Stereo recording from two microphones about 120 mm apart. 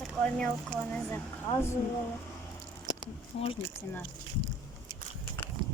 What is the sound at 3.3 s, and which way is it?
Speech, 60° left (ahead or behind).